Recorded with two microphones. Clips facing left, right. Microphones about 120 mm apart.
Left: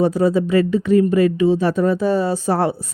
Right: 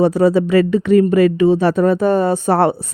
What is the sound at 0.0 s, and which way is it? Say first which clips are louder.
Speech: right 3 dB; 70° right (ahead or behind).